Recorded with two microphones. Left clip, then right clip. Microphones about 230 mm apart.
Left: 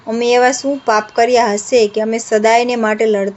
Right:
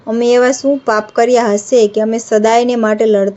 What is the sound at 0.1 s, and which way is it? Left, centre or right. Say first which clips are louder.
A woman's voice: right 1 dB; centre.